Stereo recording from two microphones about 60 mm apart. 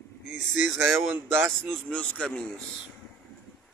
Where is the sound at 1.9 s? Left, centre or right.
Left.